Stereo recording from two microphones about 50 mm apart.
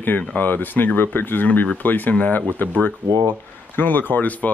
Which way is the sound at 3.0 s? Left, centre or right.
Right.